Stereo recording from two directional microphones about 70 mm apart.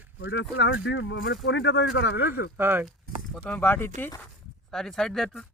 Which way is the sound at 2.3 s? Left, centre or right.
Right.